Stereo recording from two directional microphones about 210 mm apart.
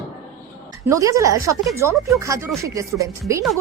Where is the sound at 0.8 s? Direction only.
15° right (ahead or behind).